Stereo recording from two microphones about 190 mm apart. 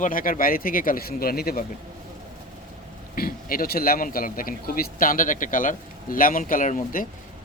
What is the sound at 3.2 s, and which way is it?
A man's voice, 50° left (ahead or behind).